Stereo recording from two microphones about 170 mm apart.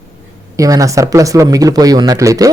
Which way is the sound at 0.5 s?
20° right (ahead or behind).